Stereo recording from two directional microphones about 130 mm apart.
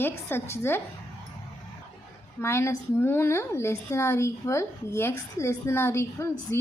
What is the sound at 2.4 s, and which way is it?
A woman's voice, 20° left (ahead or behind).